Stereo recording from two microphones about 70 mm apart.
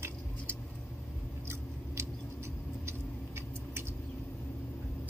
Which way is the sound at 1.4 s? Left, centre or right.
Right.